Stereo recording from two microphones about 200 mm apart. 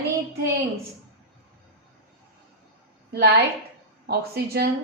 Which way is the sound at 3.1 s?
55° right (ahead or behind).